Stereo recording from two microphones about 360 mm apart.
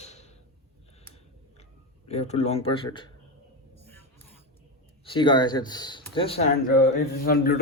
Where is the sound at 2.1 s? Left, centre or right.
Centre.